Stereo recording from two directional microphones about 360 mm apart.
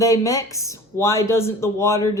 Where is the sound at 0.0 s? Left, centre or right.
Centre.